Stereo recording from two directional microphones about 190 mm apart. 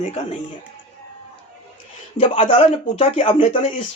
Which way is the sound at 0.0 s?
35° left (ahead or behind).